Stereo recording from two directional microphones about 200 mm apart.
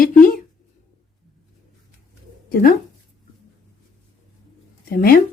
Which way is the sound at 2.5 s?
45° left (ahead or behind).